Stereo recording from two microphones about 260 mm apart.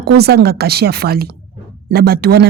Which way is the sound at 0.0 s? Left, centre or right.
Right.